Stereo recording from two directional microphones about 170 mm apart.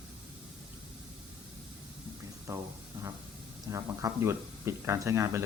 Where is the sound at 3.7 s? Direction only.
15° right (ahead or behind).